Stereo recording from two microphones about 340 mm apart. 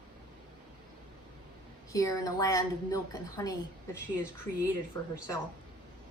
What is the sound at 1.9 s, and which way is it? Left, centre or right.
A woman's voice, centre.